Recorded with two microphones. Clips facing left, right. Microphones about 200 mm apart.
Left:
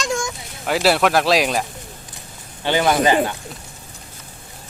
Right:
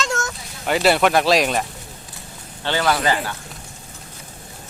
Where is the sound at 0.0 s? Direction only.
15° left (ahead or behind).